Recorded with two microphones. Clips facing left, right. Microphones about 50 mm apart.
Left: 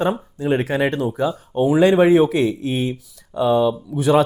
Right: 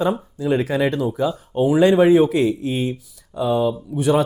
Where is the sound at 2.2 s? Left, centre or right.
Left.